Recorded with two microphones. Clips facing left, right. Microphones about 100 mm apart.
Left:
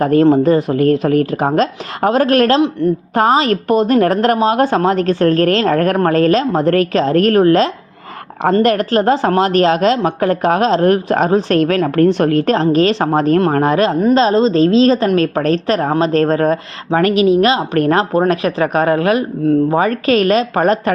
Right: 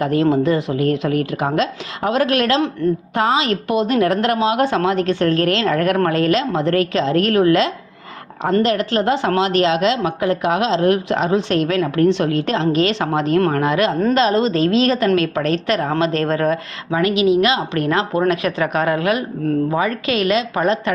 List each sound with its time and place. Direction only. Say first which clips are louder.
0.0 s a woman's voice: left 5 dB; 45° left (ahead or behind)
12.7 s a woman's voice: left 5 dB; 35° left (ahead or behind)